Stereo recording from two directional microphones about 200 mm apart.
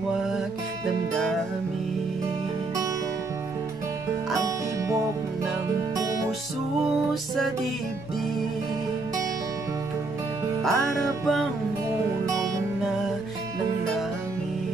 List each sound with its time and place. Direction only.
5.9 s music: 15° right (ahead or behind)
10.6 s music: centre (ahead or behind)
12.3 s music: 15° right (ahead or behind)